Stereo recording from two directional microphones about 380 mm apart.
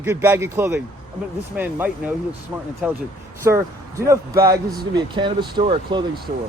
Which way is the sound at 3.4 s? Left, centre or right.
Centre.